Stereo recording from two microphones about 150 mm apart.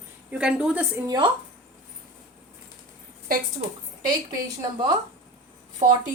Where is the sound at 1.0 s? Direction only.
30° right (ahead or behind).